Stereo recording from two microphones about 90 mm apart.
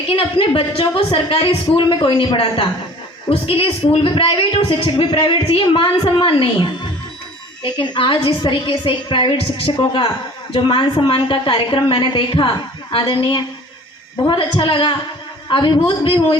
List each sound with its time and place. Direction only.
0.2 s a man's voice: 90° left; by 16.4 s 55° left (ahead or behind)